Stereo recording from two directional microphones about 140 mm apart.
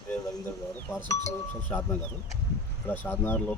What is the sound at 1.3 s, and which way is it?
Speech, 15° left (ahead or behind).